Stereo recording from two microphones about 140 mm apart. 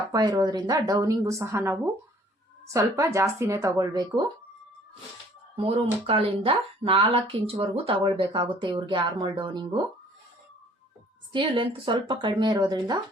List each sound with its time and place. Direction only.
0.1 s a woman's voice: 30° right (ahead or behind)
5.5 s speech: 40° right (ahead or behind)
11.3 s speech: 35° right (ahead or behind)